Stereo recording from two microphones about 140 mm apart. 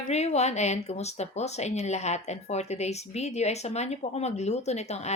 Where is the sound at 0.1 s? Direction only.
50° left (ahead or behind).